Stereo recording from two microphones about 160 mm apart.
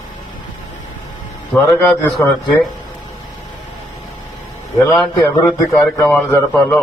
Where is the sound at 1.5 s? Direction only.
Centre (ahead or behind).